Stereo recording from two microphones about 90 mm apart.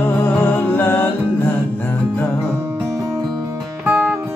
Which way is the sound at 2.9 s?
30° right (ahead or behind).